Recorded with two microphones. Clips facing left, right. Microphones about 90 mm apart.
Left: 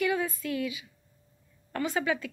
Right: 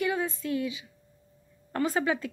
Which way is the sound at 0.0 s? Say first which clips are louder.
Even; 25° right (ahead or behind).